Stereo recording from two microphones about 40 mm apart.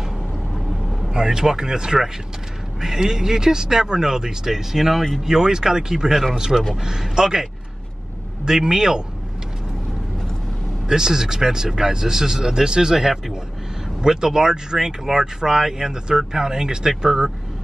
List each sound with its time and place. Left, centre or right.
1.0 s speech: centre
8.5 s speech: centre
10.9 s speech: centre